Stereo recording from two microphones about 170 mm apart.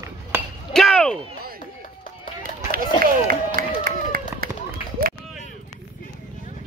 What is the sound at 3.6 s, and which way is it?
Run, 60° right (ahead or behind).